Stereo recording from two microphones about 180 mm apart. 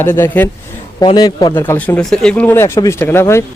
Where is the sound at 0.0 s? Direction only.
10° left (ahead or behind).